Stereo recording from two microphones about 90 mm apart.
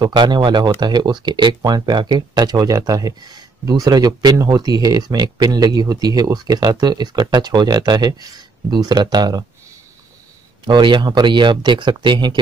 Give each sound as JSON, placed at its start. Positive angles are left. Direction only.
{"t": 0.0, "sound": "speech", "side_deg": -55}
{"t": 10.7, "sound": "speech", "side_deg": -60}